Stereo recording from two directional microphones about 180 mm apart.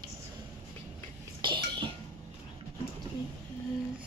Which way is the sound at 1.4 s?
25° right (ahead or behind).